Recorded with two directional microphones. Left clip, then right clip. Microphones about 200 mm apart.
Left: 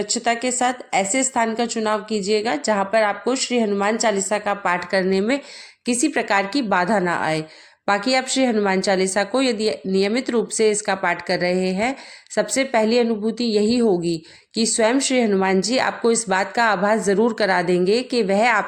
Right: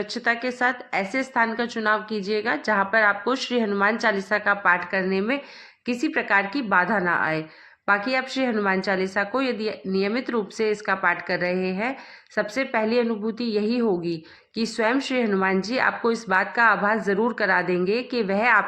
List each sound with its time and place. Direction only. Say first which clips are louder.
0.0 s a woman's voice: left 3 dB; 30° left (ahead or behind)